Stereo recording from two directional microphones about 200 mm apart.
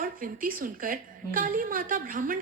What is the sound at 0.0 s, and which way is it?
A woman's voice, 45° right (ahead or behind).